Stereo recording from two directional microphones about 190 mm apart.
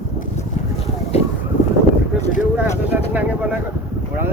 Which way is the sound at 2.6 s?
10° right (ahead or behind).